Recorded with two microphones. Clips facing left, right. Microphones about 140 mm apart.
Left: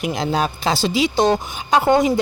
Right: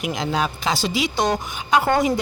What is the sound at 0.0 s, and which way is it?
A woman's voice, 35° left (ahead or behind).